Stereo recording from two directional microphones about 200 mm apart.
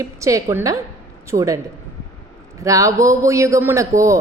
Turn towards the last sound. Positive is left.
turn(degrees=-15)  # may be behind; listen again after turning